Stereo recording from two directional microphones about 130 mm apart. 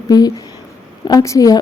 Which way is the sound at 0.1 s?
30° left (ahead or behind).